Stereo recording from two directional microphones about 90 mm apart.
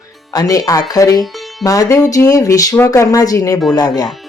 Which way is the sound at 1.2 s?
Centre (ahead or behind).